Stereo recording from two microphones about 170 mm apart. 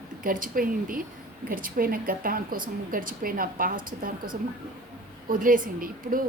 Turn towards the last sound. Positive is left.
turn(degrees=-55)  # may be behind; listen again after turning